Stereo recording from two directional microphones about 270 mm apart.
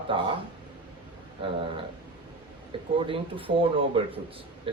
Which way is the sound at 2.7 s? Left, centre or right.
Centre.